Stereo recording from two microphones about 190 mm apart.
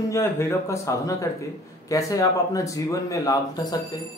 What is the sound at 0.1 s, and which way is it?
Speech, 15° left (ahead or behind).